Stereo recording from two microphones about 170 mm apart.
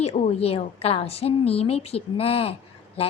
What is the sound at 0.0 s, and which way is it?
A woman's voice, 35° left (ahead or behind).